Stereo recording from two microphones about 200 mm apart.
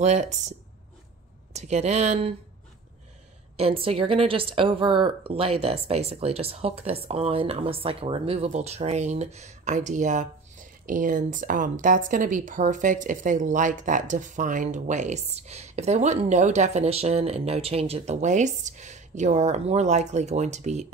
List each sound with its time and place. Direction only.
0.0 s speech: 35° right (ahead or behind)
3.5 s a woman's voice: 30° right (ahead or behind)